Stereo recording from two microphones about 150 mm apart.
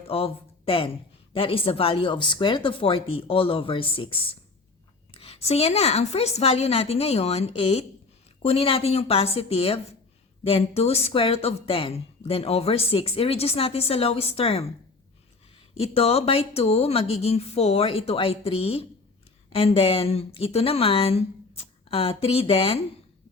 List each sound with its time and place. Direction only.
0.0 s a woman's voice: 40° left (ahead or behind)
15.8 s speech: 40° left (ahead or behind)